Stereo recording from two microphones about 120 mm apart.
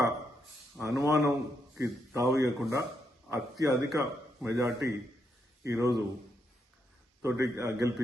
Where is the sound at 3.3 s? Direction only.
30° right (ahead or behind).